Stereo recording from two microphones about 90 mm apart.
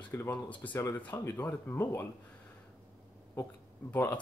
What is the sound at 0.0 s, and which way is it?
Speech, 20° left (ahead or behind).